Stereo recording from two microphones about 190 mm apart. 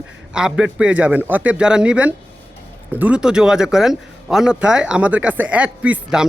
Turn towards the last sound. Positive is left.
turn(degrees=-5)  # may be behind; listen again after turning